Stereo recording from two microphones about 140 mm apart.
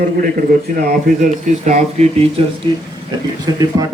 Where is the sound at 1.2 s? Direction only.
60° right (ahead or behind).